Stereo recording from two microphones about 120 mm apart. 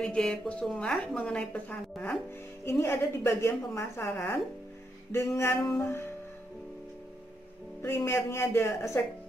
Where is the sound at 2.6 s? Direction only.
20° left (ahead or behind).